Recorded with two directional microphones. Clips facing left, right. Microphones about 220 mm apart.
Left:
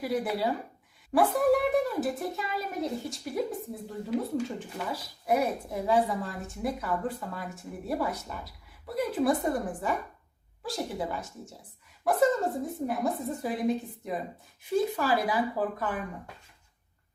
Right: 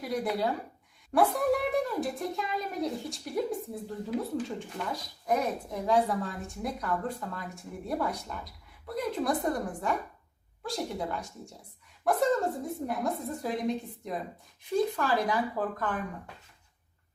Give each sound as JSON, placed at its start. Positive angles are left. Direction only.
{"t": 0.0, "sound": "a woman's voice", "side_deg": 5}